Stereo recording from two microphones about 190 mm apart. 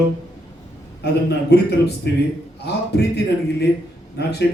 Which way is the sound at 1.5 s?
60° left (ahead or behind).